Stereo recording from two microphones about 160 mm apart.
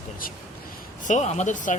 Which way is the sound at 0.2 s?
60° left (ahead or behind).